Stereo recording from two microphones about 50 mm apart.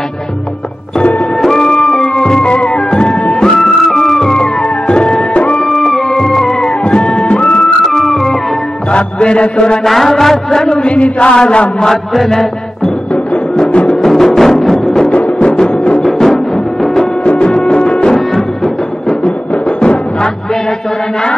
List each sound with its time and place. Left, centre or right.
1.4 s music: centre
5.6 s music: centre
6.6 s music: centre
7.8 s organ: centre
8.9 s mantra: left
9.8 s mantra: centre
11.9 s mantra: centre
13.6 s music: left
14.0 s music: centre
15.0 s music: left
15.3 s music: centre
16.0 s music: centre
16.9 s music: left